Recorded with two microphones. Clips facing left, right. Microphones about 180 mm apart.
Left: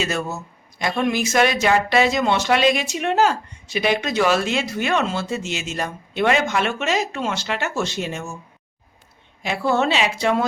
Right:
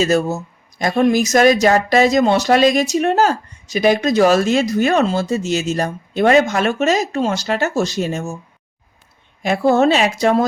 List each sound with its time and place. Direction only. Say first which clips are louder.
0.0 s speech: right 8 dB; 40° right (ahead or behind)
9.4 s a woman's voice: right 7 dB; 45° right (ahead or behind)